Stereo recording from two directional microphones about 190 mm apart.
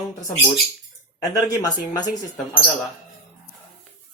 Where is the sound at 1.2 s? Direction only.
20° left (ahead or behind).